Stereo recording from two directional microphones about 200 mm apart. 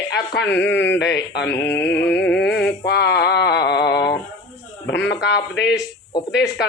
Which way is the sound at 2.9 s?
55° left (ahead or behind).